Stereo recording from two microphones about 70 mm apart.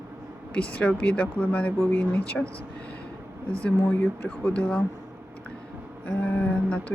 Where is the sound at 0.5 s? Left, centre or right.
Centre.